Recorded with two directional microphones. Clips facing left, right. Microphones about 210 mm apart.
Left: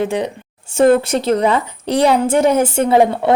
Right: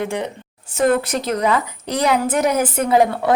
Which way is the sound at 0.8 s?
25° left (ahead or behind).